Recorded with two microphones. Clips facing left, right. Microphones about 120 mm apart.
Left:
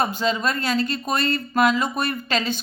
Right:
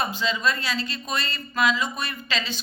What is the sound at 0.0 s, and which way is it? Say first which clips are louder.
A woman's voice: left 3 dB; 50° left (ahead or behind).